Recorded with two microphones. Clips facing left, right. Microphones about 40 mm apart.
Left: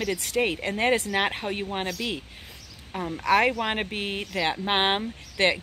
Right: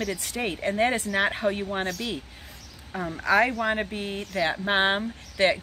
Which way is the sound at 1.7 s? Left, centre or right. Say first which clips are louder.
Right 1 dB; centre.